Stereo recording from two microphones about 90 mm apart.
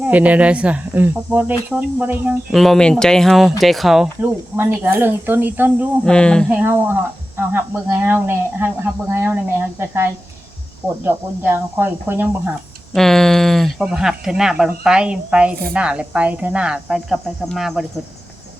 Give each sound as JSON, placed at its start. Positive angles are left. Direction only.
{"t": 0.1, "sound": "speech", "side_deg": -15}
{"t": 2.5, "sound": "speech", "side_deg": 0}
{"t": 4.2, "sound": "speech", "side_deg": -25}
{"t": 6.1, "sound": "speech", "side_deg": 10}
{"t": 6.5, "sound": "speech", "side_deg": -20}
{"t": 12.9, "sound": "speech", "side_deg": 5}